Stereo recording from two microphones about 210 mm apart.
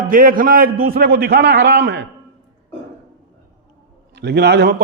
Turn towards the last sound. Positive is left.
turn(degrees=-50)  # may be behind; listen again after turning